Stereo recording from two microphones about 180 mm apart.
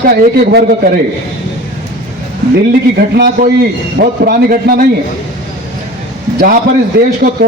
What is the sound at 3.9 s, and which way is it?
Speech, 55° right (ahead or behind).